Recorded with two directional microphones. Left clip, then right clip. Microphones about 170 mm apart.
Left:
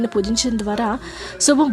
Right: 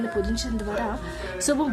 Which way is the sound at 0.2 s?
40° left (ahead or behind).